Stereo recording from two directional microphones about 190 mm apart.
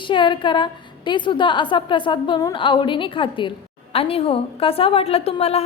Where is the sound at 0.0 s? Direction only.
25° left (ahead or behind).